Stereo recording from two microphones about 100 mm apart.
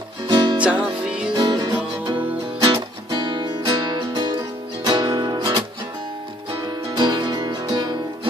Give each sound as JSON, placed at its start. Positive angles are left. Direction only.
{"t": 0.3, "sound": "music", "side_deg": -50}
{"t": 0.6, "sound": "music", "side_deg": -10}
{"t": 1.3, "sound": "music", "side_deg": -40}
{"t": 2.6, "sound": "music", "side_deg": -55}
{"t": 7.0, "sound": "music", "side_deg": -45}